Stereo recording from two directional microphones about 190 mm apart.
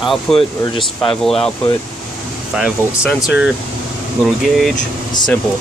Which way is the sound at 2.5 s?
5° right (ahead or behind).